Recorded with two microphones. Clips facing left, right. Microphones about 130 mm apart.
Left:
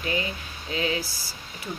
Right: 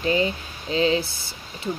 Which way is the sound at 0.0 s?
30° right (ahead or behind).